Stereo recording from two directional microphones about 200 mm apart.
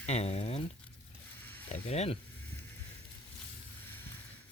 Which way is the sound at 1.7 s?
35° left (ahead or behind).